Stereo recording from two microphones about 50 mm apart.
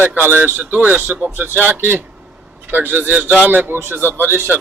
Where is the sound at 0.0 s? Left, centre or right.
Right.